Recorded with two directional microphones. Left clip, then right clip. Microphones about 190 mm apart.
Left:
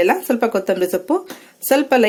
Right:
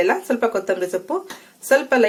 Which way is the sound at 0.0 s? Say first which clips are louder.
Left 2 dB; 45° left (ahead or behind).